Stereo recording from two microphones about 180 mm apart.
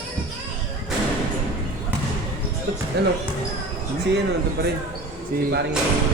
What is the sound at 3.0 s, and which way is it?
Speech, 70° right (ahead or behind).